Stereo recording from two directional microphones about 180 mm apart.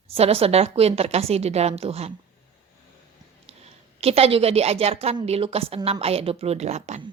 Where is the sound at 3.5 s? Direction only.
35° right (ahead or behind).